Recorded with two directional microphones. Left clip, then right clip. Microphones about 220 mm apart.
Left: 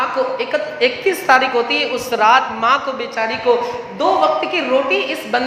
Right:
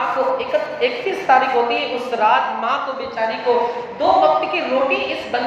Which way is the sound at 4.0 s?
45° left (ahead or behind).